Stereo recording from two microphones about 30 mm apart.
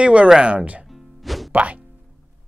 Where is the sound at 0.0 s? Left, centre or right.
Right.